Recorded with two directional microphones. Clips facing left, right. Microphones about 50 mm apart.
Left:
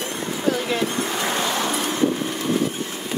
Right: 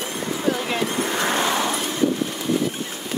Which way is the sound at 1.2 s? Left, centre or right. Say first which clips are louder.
Right 3 dB; right.